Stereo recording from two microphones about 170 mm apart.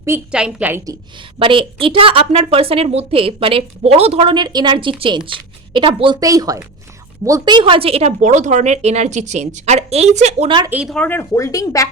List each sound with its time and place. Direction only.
0.3 s a woman's voice: 5° right (ahead or behind)
1.4 s a woman's voice: 30° right (ahead or behind)
10.7 s speech: 5° right (ahead or behind)
10.9 s speech: 10° left (ahead or behind)